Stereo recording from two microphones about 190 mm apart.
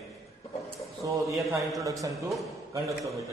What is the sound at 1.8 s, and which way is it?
Speech, 15° right (ahead or behind).